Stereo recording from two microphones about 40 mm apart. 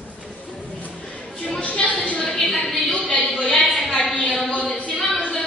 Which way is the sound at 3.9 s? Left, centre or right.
Centre.